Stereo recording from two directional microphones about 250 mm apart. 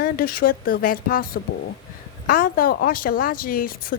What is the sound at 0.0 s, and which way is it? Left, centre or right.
Speech, left.